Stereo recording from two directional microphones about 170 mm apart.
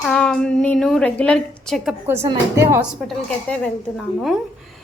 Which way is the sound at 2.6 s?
15° right (ahead or behind).